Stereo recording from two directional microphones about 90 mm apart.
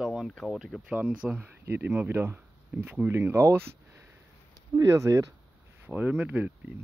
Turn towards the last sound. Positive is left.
turn(degrees=-15)  # may be behind; listen again after turning